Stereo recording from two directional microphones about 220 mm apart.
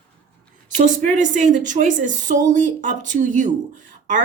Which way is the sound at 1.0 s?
35° right (ahead or behind).